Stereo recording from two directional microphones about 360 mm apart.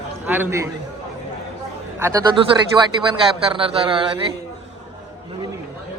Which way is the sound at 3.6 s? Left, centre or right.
Centre.